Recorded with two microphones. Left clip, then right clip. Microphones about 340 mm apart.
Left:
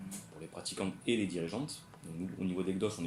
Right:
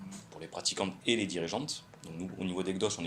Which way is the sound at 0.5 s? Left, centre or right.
Centre.